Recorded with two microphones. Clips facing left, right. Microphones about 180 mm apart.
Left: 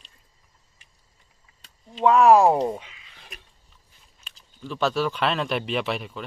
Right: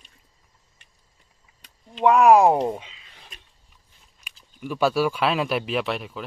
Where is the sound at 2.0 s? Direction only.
15° right (ahead or behind).